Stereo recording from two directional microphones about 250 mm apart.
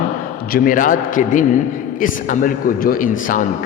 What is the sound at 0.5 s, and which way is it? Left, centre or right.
A man's voice, left.